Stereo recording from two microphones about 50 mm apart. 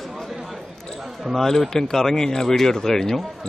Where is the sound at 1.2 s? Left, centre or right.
Centre.